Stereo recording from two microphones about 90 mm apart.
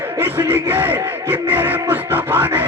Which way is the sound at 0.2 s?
25° right (ahead or behind).